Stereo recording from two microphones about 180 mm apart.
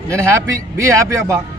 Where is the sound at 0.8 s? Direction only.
15° right (ahead or behind).